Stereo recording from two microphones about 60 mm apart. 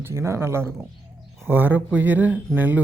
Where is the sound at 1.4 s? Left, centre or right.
Right.